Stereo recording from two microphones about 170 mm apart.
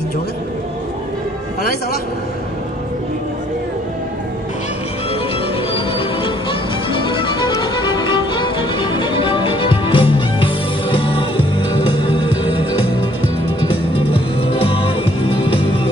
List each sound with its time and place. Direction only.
5.7 s music: 30° left (ahead or behind)
6.9 s violin: 30° left (ahead or behind)
10.1 s music: 30° left (ahead or behind)